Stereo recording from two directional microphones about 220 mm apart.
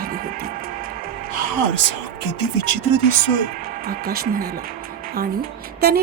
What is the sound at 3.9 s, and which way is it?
Speech, 45° right (ahead or behind).